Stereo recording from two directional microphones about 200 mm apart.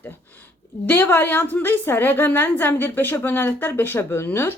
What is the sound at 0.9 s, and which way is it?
A woman's voice, 10° left (ahead or behind).